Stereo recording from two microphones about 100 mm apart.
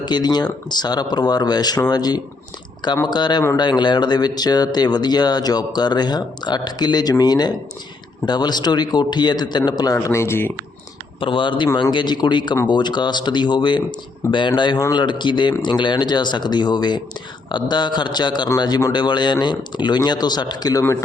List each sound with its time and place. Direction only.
0.0 s speech: 45° left (ahead or behind); by 10.5 s 25° left (ahead or behind)
11.2 s speech: 60° left (ahead or behind); by 20.8 s 40° left (ahead or behind)